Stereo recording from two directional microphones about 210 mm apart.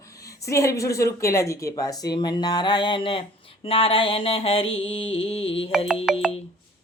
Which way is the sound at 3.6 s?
25° left (ahead or behind).